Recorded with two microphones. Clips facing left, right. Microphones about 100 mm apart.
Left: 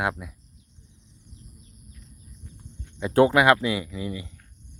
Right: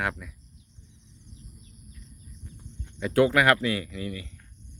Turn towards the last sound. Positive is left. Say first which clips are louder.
# left 2 dB
turn(degrees=20)  # may be behind; listen again after turning